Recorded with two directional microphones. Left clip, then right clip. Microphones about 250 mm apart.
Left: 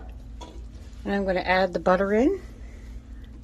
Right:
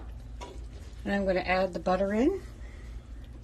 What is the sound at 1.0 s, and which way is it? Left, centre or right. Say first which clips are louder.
Speech: left 4 dB; centre.